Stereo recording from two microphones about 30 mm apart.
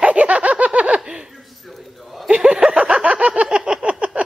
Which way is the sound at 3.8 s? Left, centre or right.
Right.